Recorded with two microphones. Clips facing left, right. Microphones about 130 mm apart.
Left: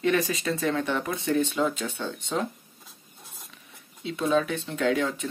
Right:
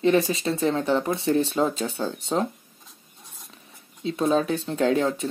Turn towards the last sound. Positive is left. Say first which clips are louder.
# right 3 dB
turn(degrees=-35)  # may be behind; listen again after turning